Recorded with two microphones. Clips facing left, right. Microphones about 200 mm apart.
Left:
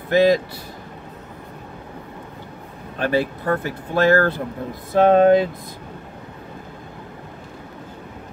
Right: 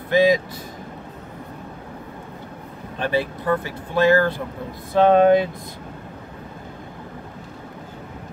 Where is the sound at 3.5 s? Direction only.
50° left (ahead or behind).